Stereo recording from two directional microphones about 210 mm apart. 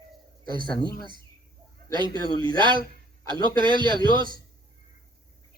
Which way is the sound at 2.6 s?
20° right (ahead or behind).